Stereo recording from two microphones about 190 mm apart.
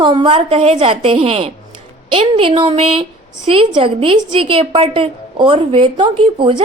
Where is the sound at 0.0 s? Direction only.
25° right (ahead or behind).